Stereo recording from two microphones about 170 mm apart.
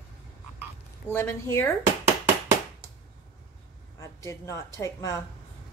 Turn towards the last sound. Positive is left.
turn(degrees=20)  # may be behind; listen again after turning